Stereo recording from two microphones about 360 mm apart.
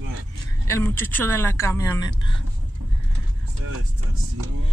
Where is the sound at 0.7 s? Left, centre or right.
Centre.